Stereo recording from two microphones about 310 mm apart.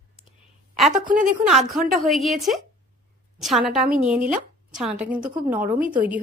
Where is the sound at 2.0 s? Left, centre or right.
Centre.